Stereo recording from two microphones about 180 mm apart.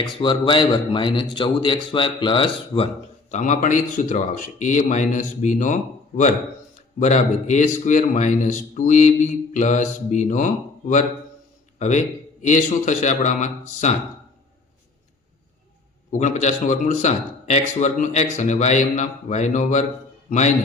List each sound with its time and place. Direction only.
0.0 s speech: 25° left (ahead or behind)
3.3 s speech: 40° left (ahead or behind)
7.0 s a man's voice: 40° left (ahead or behind)
16.1 s a man's voice: 40° left (ahead or behind)